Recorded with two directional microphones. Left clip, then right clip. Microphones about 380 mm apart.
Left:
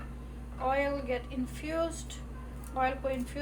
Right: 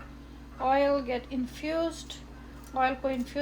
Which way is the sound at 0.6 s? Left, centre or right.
Right.